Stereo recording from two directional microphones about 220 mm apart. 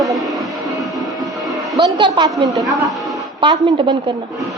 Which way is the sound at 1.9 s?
20° right (ahead or behind).